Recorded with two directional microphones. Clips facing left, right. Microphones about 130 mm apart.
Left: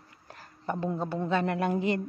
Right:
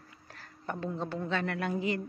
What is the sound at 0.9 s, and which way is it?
Speech, 10° left (ahead or behind).